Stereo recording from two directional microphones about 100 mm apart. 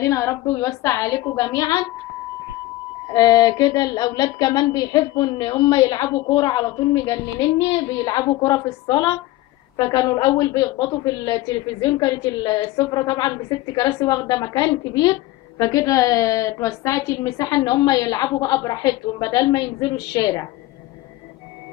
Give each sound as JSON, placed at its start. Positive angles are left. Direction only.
{"t": 0.0, "sound": "a woman's voice", "side_deg": 30}
{"t": 3.1, "sound": "a woman's voice", "side_deg": 40}
{"t": 5.6, "sound": "a woman's voice", "side_deg": 30}
{"t": 6.3, "sound": "a woman's voice", "side_deg": 45}